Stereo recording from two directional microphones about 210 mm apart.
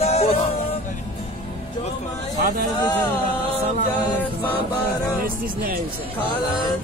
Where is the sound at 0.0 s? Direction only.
30° left (ahead or behind).